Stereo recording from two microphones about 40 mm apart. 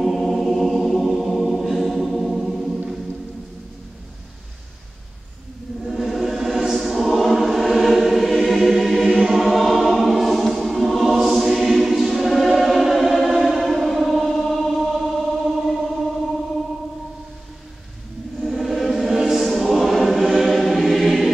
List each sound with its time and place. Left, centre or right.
0.0 s choir: centre
5.9 s choir: centre
13.9 s music: centre
14.2 s chant: centre
18.4 s choir: centre